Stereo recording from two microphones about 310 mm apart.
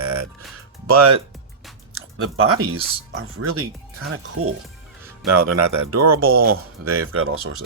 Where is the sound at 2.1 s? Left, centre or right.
Right.